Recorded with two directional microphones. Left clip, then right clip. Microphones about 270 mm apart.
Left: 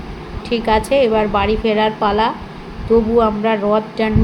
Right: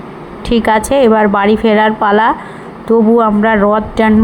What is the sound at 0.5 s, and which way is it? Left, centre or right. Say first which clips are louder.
Speech: right 4 dB; right.